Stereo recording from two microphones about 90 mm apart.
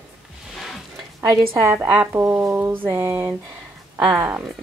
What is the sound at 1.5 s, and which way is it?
Speech, 30° right (ahead or behind).